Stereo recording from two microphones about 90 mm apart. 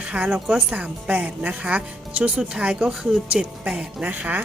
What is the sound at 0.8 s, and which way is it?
A woman's voice, 15° right (ahead or behind).